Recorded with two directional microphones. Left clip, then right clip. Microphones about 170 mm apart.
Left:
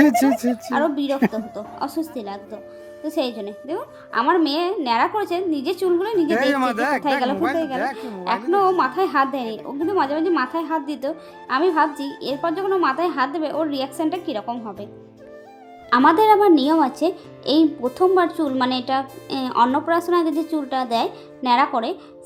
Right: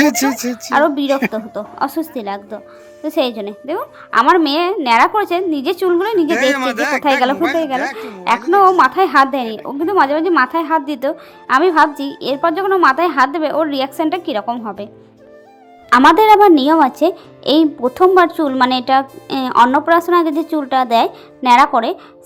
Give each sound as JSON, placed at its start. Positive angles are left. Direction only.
{"t": 0.0, "sound": "speech", "side_deg": 10}
{"t": 0.7, "sound": "a woman's voice", "side_deg": -20}
{"t": 6.3, "sound": "speech", "side_deg": 15}
{"t": 8.4, "sound": "a woman's voice", "side_deg": -20}
{"t": 15.9, "sound": "a woman's voice", "side_deg": -30}